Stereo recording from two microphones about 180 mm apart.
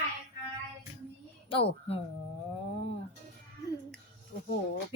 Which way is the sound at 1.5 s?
30° left (ahead or behind).